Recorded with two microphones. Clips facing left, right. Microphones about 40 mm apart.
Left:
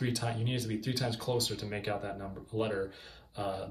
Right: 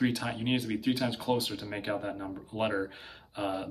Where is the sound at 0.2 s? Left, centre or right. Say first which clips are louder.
Right 4 dB; right.